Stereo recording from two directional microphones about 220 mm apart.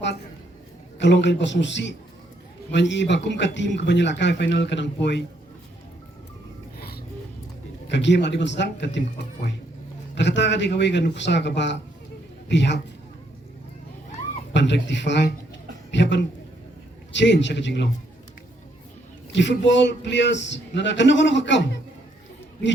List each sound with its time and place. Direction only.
0.9 s speech: 55° left (ahead or behind)
6.7 s music: 45° left (ahead or behind)
7.9 s speech: 55° left (ahead or behind)
14.5 s a man's voice: 55° left (ahead or behind)
19.3 s speech: 55° left (ahead or behind)